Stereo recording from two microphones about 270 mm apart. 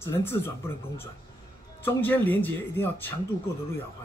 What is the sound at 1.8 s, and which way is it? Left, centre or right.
A man's voice, centre.